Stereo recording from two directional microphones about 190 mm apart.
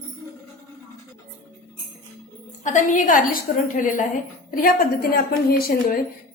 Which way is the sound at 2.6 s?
40° left (ahead or behind).